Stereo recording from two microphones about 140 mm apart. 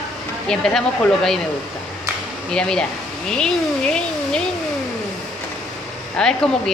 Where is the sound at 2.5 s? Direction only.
5° left (ahead or behind).